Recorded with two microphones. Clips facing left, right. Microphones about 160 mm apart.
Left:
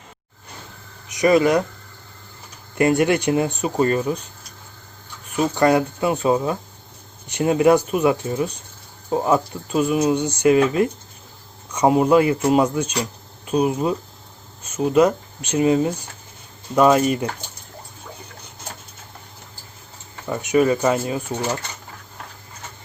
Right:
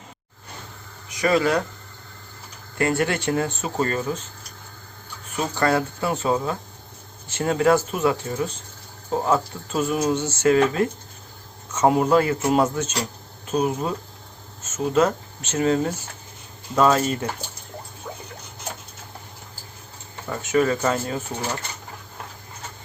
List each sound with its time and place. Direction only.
1.0 s speech: 20° left (ahead or behind)
2.7 s speech: 20° left (ahead or behind)
5.5 s speech: 15° left (ahead or behind)
11.9 s speech: 5° left (ahead or behind)
20.3 s speech: 20° left (ahead or behind)